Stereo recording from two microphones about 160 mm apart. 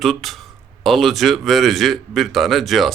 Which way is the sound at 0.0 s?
Centre (ahead or behind).